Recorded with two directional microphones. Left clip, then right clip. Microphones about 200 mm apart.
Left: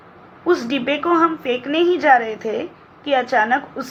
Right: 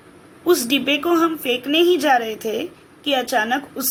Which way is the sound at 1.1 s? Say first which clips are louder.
Left 4 dB; 20° right (ahead or behind).